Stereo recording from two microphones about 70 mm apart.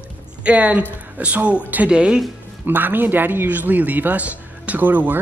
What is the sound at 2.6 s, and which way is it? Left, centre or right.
A man's voice, right.